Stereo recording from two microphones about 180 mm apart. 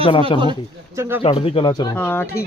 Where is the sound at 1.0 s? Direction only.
10° right (ahead or behind).